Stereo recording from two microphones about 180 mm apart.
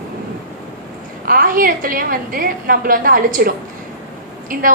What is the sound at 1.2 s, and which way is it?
A woman's voice, 55° right (ahead or behind).